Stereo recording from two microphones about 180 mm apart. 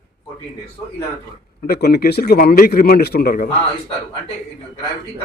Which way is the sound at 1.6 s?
60° left (ahead or behind).